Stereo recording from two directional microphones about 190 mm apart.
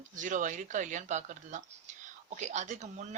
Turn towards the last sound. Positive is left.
turn(degrees=-40)  # may be behind; listen again after turning